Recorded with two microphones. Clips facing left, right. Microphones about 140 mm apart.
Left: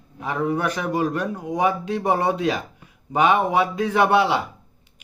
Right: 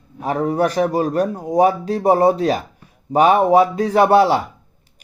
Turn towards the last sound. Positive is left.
turn(degrees=-40)  # may be behind; listen again after turning